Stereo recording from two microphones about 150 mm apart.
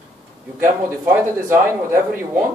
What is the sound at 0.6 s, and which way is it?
A man's voice, 15° right (ahead or behind).